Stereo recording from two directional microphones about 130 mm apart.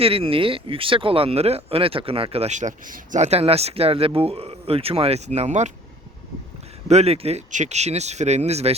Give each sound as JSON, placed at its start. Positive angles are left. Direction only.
{"t": 0.0, "sound": "speech", "side_deg": -45}
{"t": 3.2, "sound": "speech", "side_deg": -50}
{"t": 6.8, "sound": "speech", "side_deg": -55}